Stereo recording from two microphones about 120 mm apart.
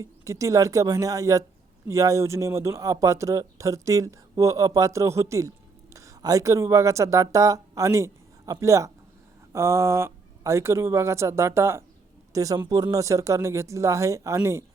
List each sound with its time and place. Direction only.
0.0 s speech: 25° right (ahead or behind)